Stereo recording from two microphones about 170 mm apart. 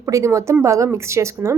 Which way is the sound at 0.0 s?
20° right (ahead or behind).